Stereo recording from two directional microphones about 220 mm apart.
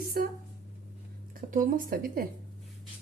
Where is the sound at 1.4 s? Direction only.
40° right (ahead or behind).